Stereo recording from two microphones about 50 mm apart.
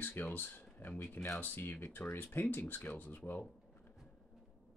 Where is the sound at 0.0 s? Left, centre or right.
Left.